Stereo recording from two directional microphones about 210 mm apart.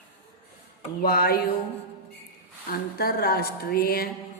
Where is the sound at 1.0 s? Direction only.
45° left (ahead or behind).